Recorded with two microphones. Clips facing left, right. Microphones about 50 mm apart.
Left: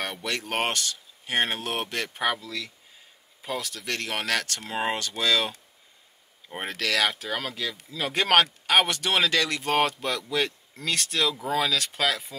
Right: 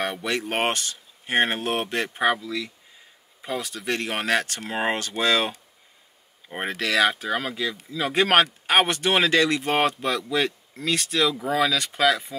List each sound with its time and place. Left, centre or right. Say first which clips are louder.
0.0 s speech: right 4 dB; right
11.2 s speech: right 3 dB; right